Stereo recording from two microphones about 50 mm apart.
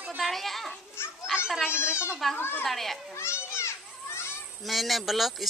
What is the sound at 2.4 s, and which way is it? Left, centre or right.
Speech, left.